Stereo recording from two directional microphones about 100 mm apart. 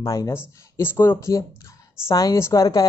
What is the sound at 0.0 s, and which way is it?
Speech, 35° left (ahead or behind).